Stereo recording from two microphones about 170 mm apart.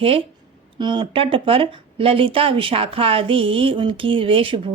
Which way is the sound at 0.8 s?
25° right (ahead or behind).